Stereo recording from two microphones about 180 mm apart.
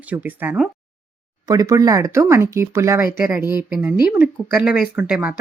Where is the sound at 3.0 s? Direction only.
50° left (ahead or behind).